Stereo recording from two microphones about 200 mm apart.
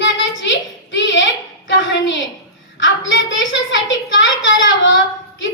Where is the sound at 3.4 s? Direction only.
70° left (ahead or behind).